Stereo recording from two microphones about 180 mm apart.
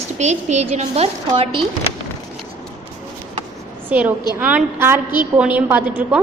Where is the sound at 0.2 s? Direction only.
40° right (ahead or behind).